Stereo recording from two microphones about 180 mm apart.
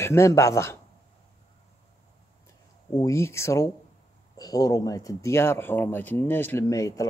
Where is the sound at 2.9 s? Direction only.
15° left (ahead or behind).